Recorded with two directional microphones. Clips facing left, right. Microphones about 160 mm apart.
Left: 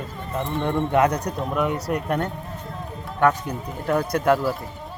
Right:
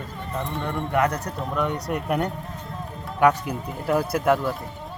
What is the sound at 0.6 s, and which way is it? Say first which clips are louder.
Speech: left 4 dB; 20° left (ahead or behind).